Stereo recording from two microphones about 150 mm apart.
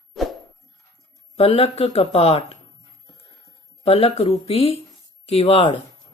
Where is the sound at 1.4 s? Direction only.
40° left (ahead or behind).